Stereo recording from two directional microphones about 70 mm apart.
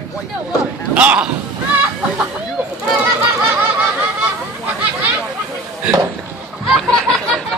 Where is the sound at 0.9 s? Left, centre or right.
Centre.